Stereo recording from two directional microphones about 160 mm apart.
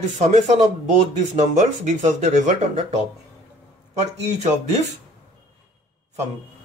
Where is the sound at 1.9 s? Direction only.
50° right (ahead or behind).